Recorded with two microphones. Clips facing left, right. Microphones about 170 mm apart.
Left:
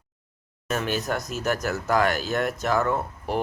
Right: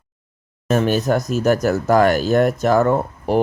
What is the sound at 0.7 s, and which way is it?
Speech, 40° right (ahead or behind).